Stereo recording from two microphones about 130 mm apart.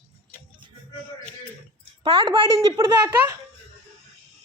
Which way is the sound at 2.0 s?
40° right (ahead or behind).